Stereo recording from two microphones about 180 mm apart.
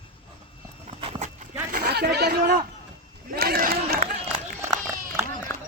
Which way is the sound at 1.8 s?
65° right (ahead or behind).